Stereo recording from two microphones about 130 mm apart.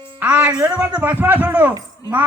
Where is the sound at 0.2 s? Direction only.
10° right (ahead or behind).